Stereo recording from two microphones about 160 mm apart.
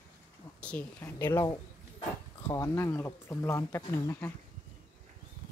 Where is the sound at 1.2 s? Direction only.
25° left (ahead or behind).